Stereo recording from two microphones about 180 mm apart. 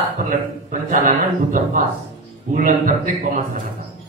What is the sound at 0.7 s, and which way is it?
Speech, 45° right (ahead or behind).